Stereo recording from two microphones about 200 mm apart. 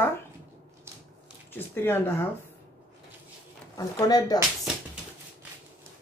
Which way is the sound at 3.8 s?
20° left (ahead or behind).